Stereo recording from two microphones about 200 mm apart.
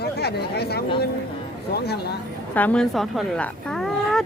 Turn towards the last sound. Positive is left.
turn(degrees=0)  # may be behind; listen again after turning